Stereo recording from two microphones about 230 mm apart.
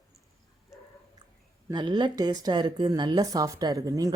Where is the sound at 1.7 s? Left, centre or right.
Centre.